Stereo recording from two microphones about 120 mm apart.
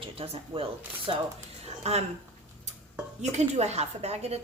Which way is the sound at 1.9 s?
60° right (ahead or behind).